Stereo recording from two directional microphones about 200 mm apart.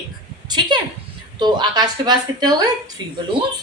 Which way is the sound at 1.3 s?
20° right (ahead or behind).